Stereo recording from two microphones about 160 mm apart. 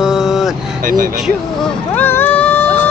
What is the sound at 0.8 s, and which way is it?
Speech, 60° right (ahead or behind).